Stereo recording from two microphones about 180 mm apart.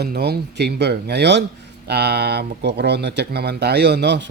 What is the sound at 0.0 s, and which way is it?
Speech, 60° right (ahead or behind).